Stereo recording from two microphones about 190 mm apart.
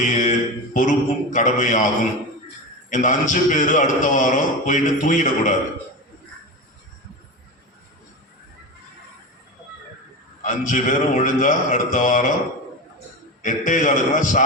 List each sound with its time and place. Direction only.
0.0 s a man's voice: 40° left (ahead or behind)
2.9 s a man's voice: 40° left (ahead or behind)
10.4 s a man's voice: 40° left (ahead or behind)
13.4 s a man's voice: 40° left (ahead or behind)